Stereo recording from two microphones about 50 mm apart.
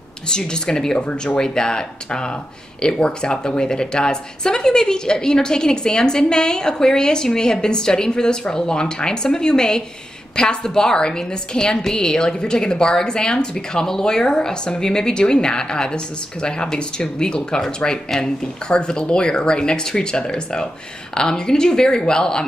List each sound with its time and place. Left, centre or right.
0.3 s a woman's voice: centre